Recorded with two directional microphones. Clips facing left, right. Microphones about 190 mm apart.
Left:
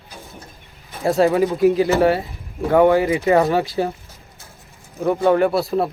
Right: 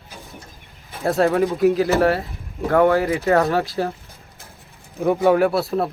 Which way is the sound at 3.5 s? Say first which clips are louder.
Left 2 dB; centre (ahead or behind).